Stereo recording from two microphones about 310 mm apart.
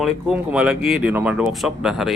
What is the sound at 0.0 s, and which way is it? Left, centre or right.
Speech, centre.